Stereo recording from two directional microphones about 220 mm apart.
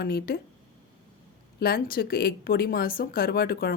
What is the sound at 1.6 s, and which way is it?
Speech, 45° left (ahead or behind).